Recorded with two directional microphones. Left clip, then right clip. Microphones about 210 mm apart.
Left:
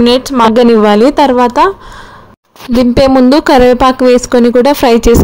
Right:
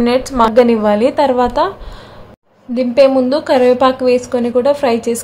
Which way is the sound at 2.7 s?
40° left (ahead or behind).